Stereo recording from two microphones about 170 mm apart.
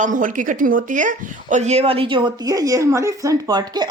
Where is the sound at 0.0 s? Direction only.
50° right (ahead or behind).